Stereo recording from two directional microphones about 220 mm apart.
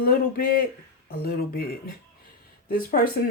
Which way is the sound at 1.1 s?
45° left (ahead or behind).